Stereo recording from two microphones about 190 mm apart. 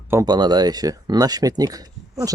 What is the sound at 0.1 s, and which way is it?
Speech, 20° right (ahead or behind).